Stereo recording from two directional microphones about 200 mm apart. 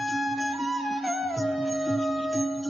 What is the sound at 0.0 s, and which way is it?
Music, centre (ahead or behind).